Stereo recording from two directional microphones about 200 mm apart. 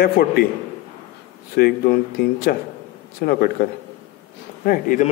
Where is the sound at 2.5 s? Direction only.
50° left (ahead or behind).